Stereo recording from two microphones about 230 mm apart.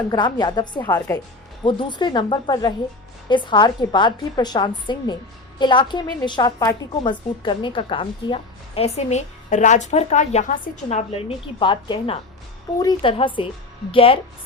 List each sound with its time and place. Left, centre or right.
0.1 s a woman's voice: centre